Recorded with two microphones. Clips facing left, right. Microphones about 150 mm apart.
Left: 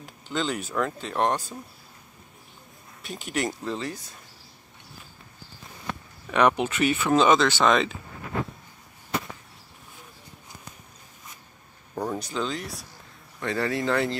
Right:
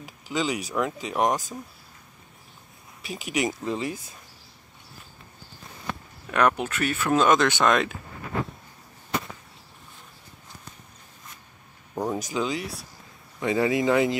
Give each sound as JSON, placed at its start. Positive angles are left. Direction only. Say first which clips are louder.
{"t": 0.0, "sound": "a sound", "louder": "right 1 dB", "side_deg": -10}
{"t": 0.7, "sound": "speech", "louder": "even", "side_deg": -10}
{"t": 3.0, "sound": "speech", "louder": "right 2 dB", "side_deg": 0}
{"t": 6.2, "sound": "speech", "louder": "left 1 dB", "side_deg": 0}
{"t": 11.9, "sound": "a sound", "louder": "right 2 dB", "side_deg": -5}
{"t": 12.3, "sound": "speech", "louder": "right 2 dB", "side_deg": -10}
{"t": 13.4, "sound": "speech", "louder": "right 4 dB", "side_deg": -15}